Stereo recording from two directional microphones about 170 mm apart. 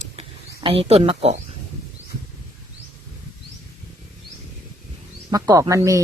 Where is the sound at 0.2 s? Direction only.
35° right (ahead or behind).